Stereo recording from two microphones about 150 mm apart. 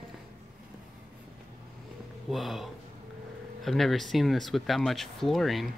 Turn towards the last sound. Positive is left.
turn(degrees=0)  # may be behind; listen again after turning